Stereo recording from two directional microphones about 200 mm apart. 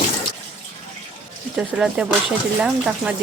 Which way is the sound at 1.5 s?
5° right (ahead or behind).